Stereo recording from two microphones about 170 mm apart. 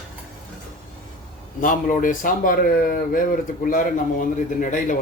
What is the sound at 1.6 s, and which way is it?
Speech, 55° left (ahead or behind).